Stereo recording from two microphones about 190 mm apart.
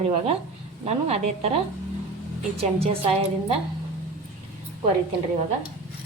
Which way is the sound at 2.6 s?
30° right (ahead or behind).